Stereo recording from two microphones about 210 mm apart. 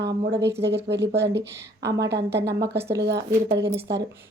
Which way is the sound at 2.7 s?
10° right (ahead or behind).